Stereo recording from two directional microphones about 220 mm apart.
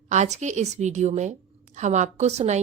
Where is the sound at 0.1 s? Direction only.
30° right (ahead or behind).